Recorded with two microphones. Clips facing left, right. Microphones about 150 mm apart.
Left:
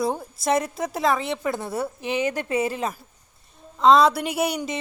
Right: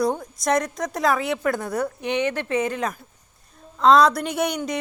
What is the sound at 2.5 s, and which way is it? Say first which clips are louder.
Speech: even; 30° left (ahead or behind).